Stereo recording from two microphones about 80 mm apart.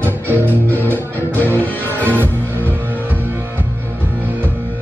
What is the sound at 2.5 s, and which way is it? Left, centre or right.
Music, right.